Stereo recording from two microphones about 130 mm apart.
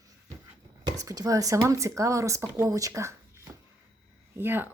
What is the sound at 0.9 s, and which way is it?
Speech, 30° right (ahead or behind).